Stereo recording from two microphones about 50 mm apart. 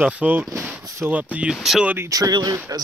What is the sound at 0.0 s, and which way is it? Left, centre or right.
Speech, right.